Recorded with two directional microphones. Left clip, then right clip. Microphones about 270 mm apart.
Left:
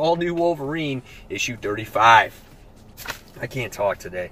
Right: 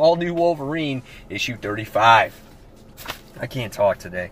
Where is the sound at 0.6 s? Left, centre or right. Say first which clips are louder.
Right 1 dB; centre.